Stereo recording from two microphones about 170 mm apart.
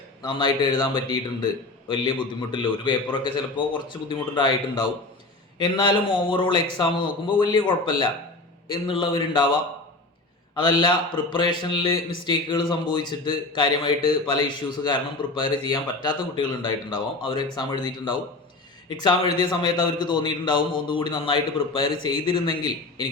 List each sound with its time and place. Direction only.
0.2 s a man's voice: 25° left (ahead or behind)
10.6 s a man's voice: 25° left (ahead or behind)